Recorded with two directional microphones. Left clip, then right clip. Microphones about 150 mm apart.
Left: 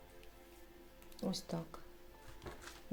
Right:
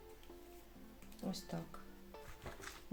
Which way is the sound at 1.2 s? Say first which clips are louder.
Left 4 dB; 55° left (ahead or behind).